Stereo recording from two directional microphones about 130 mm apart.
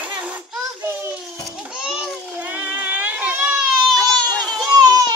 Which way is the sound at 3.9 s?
5° left (ahead or behind).